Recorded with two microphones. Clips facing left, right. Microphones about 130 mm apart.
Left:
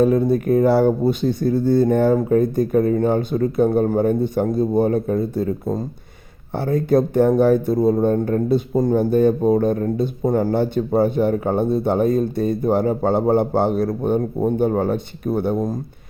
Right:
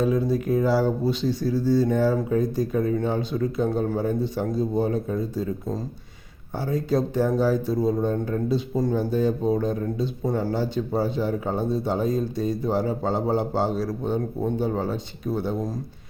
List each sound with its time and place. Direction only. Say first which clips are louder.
0.0 s speech: left 6 dB; 55° left (ahead or behind)